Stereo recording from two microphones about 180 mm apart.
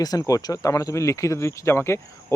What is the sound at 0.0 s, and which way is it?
Speech, 20° left (ahead or behind).